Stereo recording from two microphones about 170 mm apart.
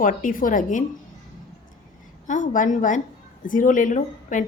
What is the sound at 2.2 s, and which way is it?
A woman's voice, 50° left (ahead or behind).